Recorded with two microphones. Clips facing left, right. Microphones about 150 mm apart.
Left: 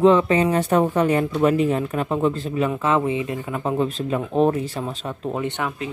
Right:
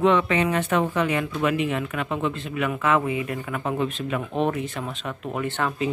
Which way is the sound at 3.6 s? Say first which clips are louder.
Left 5 dB; 30° left (ahead or behind).